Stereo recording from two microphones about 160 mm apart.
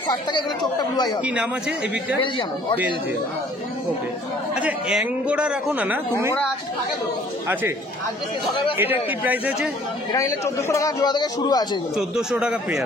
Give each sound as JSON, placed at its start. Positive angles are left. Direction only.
{"t": 0.1, "sound": "a man's voice", "side_deg": 25}
{"t": 1.2, "sound": "a man's voice", "side_deg": -10}
{"t": 4.6, "sound": "a man's voice", "side_deg": -5}
{"t": 8.7, "sound": "a man's voice", "side_deg": -10}
{"t": 10.1, "sound": "a man's voice", "side_deg": 20}
{"t": 12.0, "sound": "a man's voice", "side_deg": -5}